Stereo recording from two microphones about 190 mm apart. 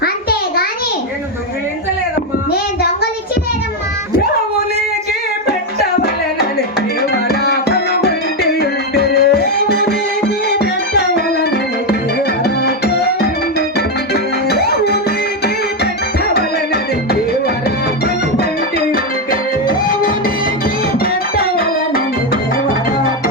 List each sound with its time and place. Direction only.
0.0 s a sound: 55° left (ahead or behind)
7.3 s music: 55° left (ahead or behind)
12.6 s music: 55° left (ahead or behind)
16.3 s music: 55° left (ahead or behind)
19.3 s music: 45° left (ahead or behind)